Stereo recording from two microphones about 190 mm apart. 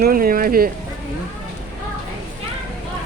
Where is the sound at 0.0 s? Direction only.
50° right (ahead or behind).